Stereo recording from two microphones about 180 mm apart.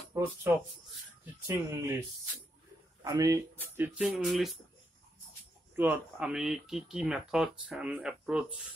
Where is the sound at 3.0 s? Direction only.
20° right (ahead or behind); by 4.6 s centre (ahead or behind).